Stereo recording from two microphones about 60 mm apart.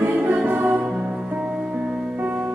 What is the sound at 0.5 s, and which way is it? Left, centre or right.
Music, right.